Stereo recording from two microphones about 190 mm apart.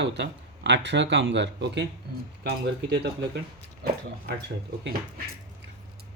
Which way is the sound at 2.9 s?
60° right (ahead or behind).